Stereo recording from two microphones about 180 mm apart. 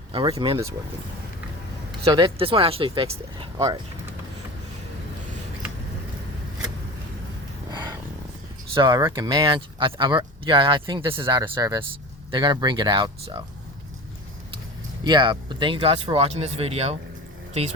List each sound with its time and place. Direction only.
0.1 s speech: 25° right (ahead or behind)
2.0 s speech: 25° right (ahead or behind)
8.7 s speech: 25° right (ahead or behind)
15.0 s a woman's voice: 25° right (ahead or behind)